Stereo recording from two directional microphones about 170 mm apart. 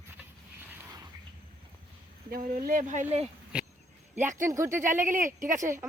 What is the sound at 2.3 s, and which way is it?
Speech, 50° right (ahead or behind).